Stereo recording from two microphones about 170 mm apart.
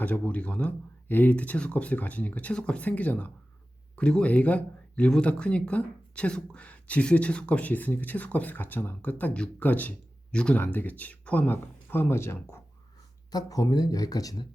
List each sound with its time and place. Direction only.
0.0 s speech: 10° left (ahead or behind)